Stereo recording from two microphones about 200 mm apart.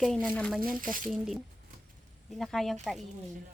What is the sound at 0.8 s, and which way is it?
Speech, 45° right (ahead or behind).